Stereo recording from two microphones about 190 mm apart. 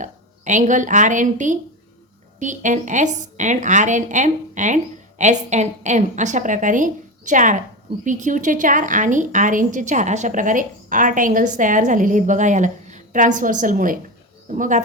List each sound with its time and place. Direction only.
0.0 s a woman's voice: 40° right (ahead or behind)